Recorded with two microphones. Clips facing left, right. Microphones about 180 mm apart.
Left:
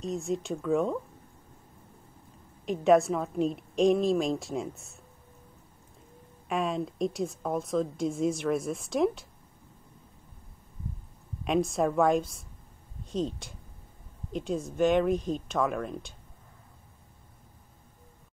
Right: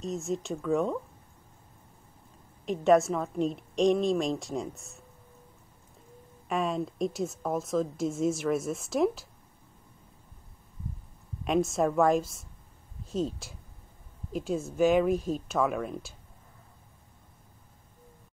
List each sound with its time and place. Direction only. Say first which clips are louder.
0.0 s a woman's voice: left 1 dB; centre (ahead or behind)
2.6 s a woman's voice: even; centre (ahead or behind)
6.5 s a woman's voice: even; centre (ahead or behind)
11.4 s a woman's voice: even; centre (ahead or behind)